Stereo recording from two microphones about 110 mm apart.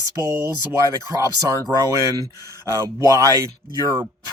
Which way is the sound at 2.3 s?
35° left (ahead or behind).